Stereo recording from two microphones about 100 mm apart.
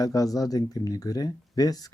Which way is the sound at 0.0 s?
35° left (ahead or behind).